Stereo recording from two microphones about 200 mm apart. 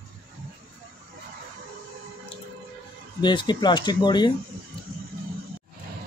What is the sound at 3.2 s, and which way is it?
Speech, 20° left (ahead or behind).